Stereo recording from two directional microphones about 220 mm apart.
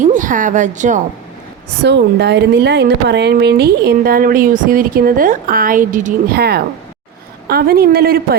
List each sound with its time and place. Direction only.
0.0 s a woman's voice: 35° right (ahead or behind)
1.8 s speech: 50° right (ahead or behind)